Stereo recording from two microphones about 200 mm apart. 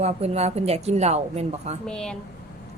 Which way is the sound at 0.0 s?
30° right (ahead or behind).